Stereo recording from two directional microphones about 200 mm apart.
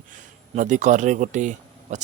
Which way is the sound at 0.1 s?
40° right (ahead or behind).